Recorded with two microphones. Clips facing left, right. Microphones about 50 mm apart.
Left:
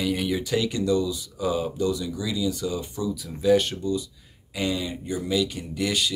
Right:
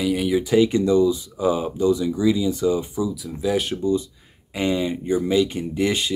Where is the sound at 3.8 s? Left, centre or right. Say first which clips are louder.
Right 6 dB; right.